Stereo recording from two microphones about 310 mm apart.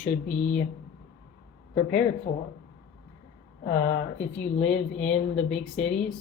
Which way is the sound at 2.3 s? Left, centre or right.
Left.